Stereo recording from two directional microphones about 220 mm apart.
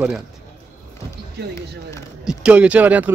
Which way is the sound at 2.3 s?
5° right (ahead or behind).